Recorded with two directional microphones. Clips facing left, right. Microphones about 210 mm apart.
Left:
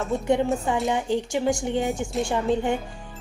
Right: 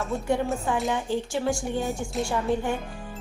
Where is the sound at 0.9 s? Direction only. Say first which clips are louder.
Left 3 dB; 15° left (ahead or behind).